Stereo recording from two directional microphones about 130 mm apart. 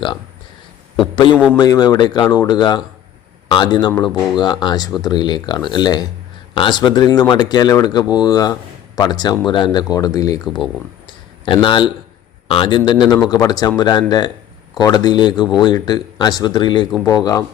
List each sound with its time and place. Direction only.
1.5 s speech: 30° left (ahead or behind)